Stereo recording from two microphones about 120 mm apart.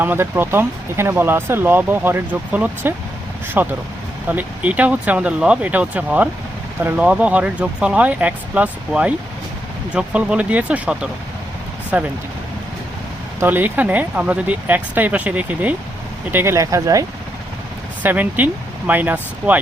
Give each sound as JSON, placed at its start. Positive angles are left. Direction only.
{"t": 0.0, "sound": "speech", "side_deg": -15}
{"t": 13.4, "sound": "speech", "side_deg": -15}
{"t": 18.0, "sound": "speech", "side_deg": -15}